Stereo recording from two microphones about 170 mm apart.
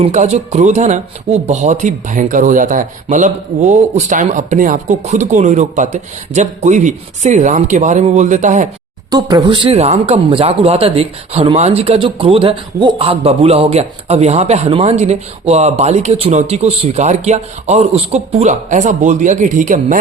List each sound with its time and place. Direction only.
0.0 s speech: 40° right (ahead or behind)
9.0 s speech: 25° right (ahead or behind); by 20.0 s 50° right (ahead or behind)